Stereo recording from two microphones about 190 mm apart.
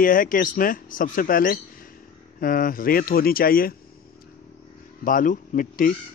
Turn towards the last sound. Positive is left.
turn(degrees=45)  # may be behind; listen again after turning